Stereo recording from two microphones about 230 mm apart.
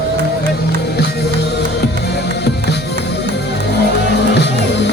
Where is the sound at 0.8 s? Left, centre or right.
Left.